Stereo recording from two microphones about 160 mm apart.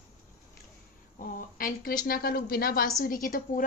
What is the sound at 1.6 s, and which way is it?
A woman's voice, 60° left (ahead or behind).